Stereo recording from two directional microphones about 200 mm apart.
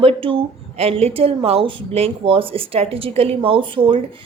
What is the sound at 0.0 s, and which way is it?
A woman's voice, 30° right (ahead or behind).